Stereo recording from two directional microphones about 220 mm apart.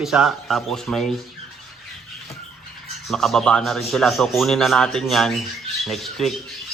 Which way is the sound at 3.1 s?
Centre (ahead or behind).